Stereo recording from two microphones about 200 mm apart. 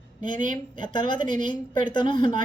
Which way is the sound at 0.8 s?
25° left (ahead or behind).